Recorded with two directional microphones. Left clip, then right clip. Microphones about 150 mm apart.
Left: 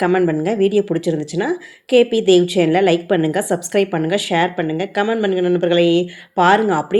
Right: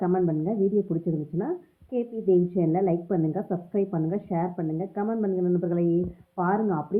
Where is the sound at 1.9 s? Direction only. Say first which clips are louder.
Left 12 dB; 20° left (ahead or behind).